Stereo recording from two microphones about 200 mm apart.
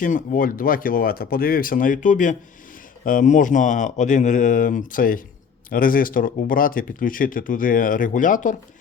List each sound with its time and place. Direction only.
0.0 s speech: 40° left (ahead or behind)